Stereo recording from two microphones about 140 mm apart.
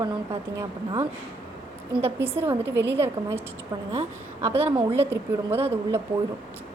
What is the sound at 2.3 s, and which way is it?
A woman's voice, 15° right (ahead or behind).